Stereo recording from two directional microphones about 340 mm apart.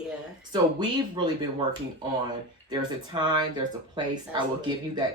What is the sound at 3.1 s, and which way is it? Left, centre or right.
Speech, centre.